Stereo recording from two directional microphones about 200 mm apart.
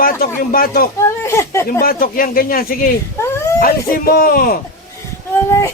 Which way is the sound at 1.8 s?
45° left (ahead or behind).